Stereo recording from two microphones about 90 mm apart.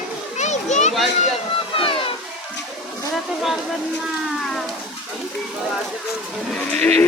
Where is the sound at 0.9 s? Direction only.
Centre (ahead or behind).